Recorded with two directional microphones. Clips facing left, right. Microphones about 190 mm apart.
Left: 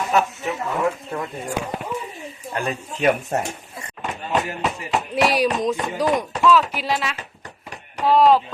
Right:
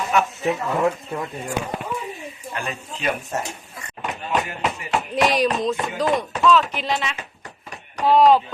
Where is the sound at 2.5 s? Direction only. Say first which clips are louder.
Left 5 dB; 40° left (ahead or behind).